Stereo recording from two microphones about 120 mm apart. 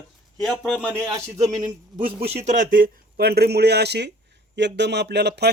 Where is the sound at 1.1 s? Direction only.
30° right (ahead or behind).